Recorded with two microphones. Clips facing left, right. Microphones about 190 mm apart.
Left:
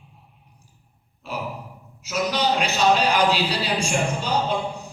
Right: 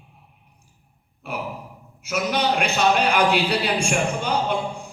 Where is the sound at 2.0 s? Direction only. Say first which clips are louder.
Even; 55° right (ahead or behind).